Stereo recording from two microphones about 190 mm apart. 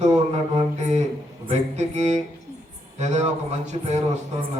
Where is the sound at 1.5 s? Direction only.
35° right (ahead or behind).